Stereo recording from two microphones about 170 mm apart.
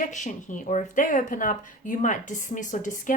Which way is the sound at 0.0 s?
45° left (ahead or behind).